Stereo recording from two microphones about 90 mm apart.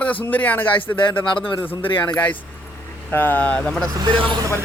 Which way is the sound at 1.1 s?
65° left (ahead or behind).